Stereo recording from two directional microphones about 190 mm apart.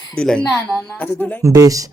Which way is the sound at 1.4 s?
15° right (ahead or behind).